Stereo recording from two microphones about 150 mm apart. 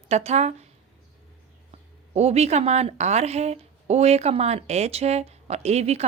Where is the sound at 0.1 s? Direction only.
45° right (ahead or behind).